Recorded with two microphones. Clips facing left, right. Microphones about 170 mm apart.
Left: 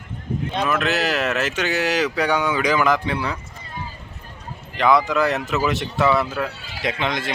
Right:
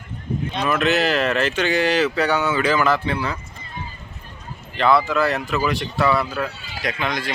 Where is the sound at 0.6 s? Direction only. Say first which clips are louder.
Right 3 dB; centre (ahead or behind).